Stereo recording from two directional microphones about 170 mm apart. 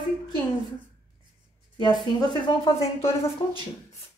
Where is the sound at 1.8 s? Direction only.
25° left (ahead or behind).